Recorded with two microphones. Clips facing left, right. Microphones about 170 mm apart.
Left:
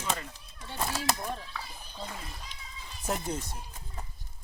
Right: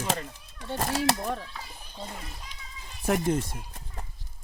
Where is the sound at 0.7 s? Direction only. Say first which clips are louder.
Right 5 dB; 50° right (ahead or behind).